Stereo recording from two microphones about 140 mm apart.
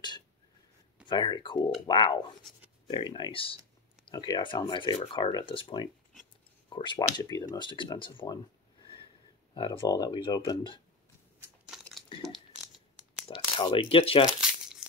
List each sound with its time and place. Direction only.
1.0 s speech: 30° left (ahead or behind)
9.5 s speech: 35° left (ahead or behind)
11.6 s a sound: 5° right (ahead or behind)
13.3 s speech: 35° left (ahead or behind)